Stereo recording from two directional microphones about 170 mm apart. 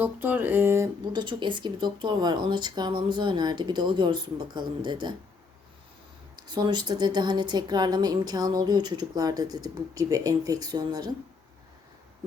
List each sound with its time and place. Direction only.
0.0 s a sound: 10° right (ahead or behind)
1.1 s a woman's voice: 25° right (ahead or behind)
6.3 s a woman's voice: 25° right (ahead or behind)